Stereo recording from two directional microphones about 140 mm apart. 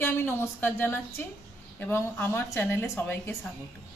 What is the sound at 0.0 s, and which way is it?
A woman's voice, 15° left (ahead or behind).